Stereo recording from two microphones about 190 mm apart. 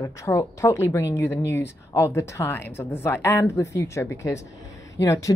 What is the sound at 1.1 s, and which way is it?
Speech, 70° left (ahead or behind).